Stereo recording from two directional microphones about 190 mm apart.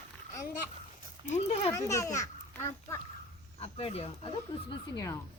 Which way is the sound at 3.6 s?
30° left (ahead or behind).